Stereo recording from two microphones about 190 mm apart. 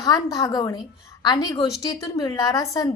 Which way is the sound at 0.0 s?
20° left (ahead or behind).